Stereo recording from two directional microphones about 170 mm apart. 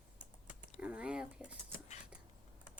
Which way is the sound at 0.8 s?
5° right (ahead or behind).